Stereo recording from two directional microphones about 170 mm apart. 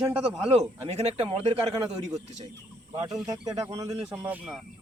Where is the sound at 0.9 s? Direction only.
40° right (ahead or behind).